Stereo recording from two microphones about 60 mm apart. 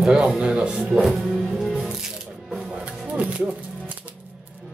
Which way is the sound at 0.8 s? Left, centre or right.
Centre.